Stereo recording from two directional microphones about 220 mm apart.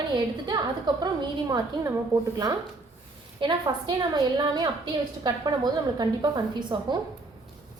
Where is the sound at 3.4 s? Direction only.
20° right (ahead or behind).